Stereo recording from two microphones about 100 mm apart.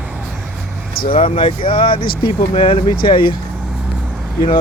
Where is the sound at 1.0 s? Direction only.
60° left (ahead or behind).